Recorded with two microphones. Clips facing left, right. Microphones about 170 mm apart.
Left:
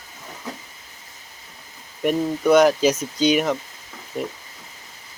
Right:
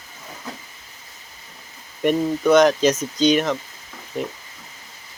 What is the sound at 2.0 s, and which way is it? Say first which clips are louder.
Speech: right 1 dB; 10° left (ahead or behind).